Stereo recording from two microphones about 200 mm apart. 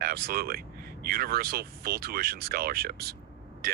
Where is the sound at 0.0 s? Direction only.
50° right (ahead or behind).